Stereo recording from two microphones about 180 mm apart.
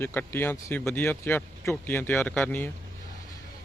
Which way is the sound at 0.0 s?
10° left (ahead or behind).